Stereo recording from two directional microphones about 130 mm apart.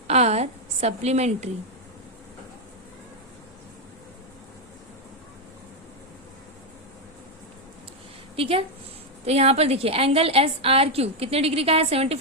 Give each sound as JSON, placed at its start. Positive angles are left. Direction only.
{"t": 0.1, "sound": "a woman's voice", "side_deg": -55}
{"t": 8.4, "sound": "a woman's voice", "side_deg": -45}